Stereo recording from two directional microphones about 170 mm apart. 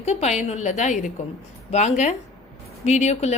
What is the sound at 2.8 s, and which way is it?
Speech, 40° left (ahead or behind).